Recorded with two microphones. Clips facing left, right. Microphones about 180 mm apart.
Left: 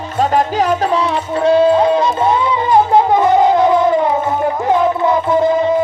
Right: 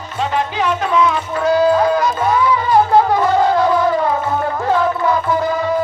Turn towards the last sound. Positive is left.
turn(degrees=25)  # may be behind; listen again after turning